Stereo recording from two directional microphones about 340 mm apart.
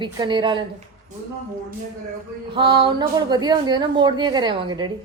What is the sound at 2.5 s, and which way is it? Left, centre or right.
A woman's voice, centre.